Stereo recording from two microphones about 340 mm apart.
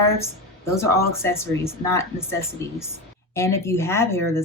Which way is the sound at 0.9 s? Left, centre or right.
Centre.